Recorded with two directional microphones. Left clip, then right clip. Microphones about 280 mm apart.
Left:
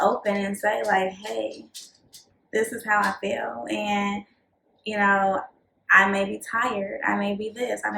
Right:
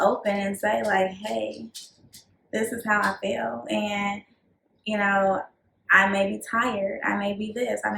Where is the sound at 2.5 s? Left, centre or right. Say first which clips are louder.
Left 1 dB; centre.